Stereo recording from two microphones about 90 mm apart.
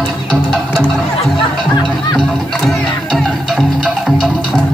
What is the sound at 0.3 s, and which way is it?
Music, 10° left (ahead or behind).